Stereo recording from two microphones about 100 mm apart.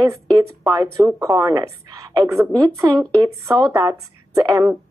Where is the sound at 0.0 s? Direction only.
35° right (ahead or behind).